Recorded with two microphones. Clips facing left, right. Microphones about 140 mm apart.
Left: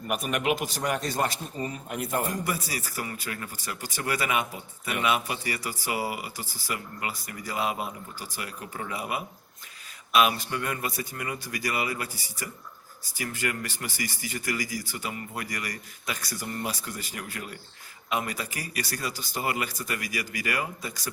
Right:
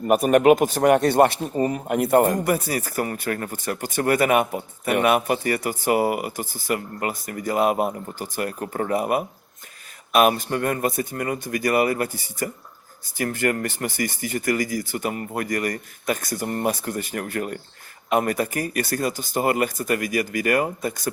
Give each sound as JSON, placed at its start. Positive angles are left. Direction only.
{"t": 0.1, "sound": "speech", "side_deg": -45}